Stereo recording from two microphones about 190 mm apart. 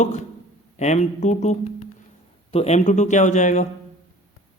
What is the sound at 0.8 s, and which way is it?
A man's voice, 35° left (ahead or behind).